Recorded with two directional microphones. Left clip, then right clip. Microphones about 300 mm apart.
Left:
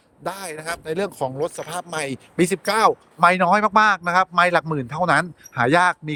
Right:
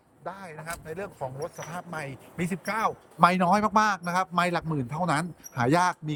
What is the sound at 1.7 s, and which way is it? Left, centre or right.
Speech, left.